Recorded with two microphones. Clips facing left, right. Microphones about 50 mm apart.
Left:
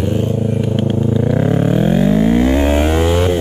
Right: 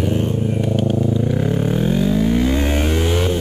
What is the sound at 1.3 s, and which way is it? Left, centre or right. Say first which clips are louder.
Vehicle: left 5 dB; left.